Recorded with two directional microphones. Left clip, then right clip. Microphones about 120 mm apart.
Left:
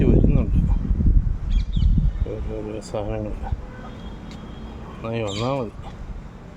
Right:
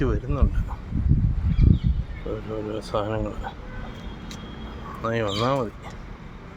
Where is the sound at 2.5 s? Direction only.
Centre (ahead or behind).